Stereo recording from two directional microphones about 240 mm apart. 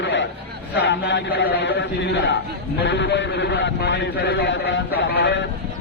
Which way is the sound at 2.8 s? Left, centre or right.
Left.